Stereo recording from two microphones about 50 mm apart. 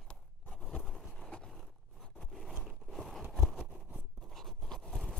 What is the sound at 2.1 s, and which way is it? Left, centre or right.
Zipper, centre.